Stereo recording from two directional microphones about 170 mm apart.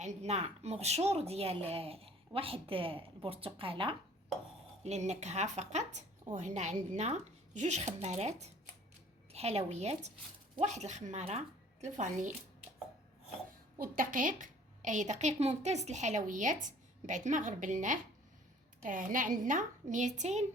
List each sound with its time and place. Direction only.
0.0 s speech: 40° right (ahead or behind)
4.8 s a woman's voice: 40° right (ahead or behind)
13.7 s a woman's voice: 55° right (ahead or behind)